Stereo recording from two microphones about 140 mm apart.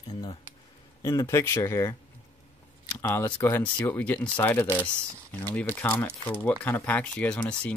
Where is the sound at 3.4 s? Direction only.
15° left (ahead or behind).